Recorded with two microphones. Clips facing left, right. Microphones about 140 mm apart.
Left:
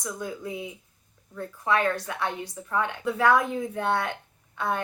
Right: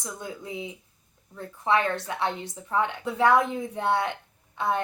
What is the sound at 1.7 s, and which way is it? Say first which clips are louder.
Speech: right 1 dB; 25° right (ahead or behind).